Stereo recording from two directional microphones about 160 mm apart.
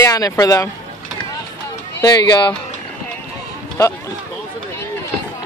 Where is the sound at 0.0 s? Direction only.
20° left (ahead or behind).